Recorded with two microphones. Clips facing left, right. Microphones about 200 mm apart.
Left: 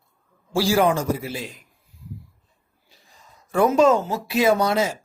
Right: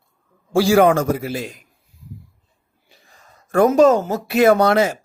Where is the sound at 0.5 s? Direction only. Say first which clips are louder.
Right 6 dB; 55° right (ahead or behind).